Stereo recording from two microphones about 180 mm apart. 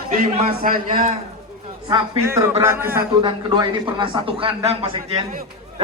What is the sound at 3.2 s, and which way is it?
A man's voice, 25° right (ahead or behind).